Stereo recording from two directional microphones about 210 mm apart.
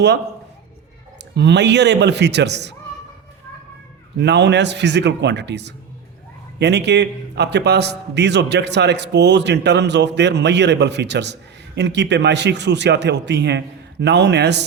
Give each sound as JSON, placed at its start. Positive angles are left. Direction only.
{"t": 1.4, "sound": "a man's voice", "side_deg": -55}
{"t": 4.2, "sound": "a man's voice", "side_deg": -55}